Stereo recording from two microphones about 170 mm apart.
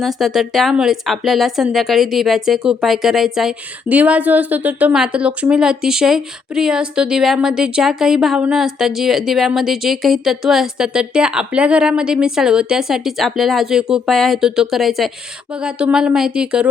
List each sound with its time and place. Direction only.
0.0 s speech: centre (ahead or behind)